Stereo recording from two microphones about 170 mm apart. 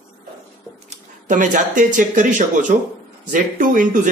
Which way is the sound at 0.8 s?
50° right (ahead or behind).